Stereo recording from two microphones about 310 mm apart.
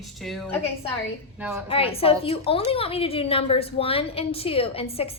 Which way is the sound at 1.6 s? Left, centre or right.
Centre.